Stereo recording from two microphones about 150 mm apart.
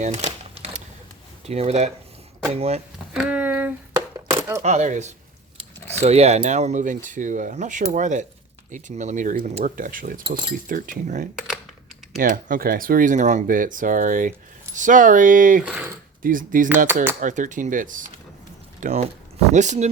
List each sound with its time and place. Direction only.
0.0 s a sound: 50° right (ahead or behind)
1.5 s speech: 45° right (ahead or behind)
3.1 s a sound: 10° right (ahead or behind)
4.6 s speech: 50° right (ahead or behind)
12.1 s speech: 70° right (ahead or behind)
15.6 s speech: 10° right (ahead or behind)
16.2 s speech: 65° right (ahead or behind)
16.6 s speech: 15° right (ahead or behind)
17.2 s speech: 60° right (ahead or behind)
18.8 s speech: 50° right (ahead or behind)